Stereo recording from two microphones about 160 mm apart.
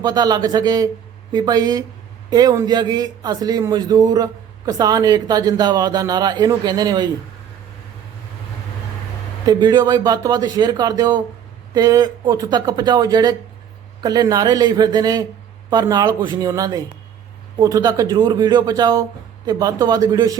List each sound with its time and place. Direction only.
0.0 s speech: 25° right (ahead or behind)
9.5 s speech: 25° right (ahead or behind)